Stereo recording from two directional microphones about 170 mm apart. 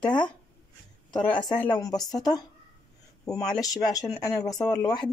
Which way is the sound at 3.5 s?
20° left (ahead or behind).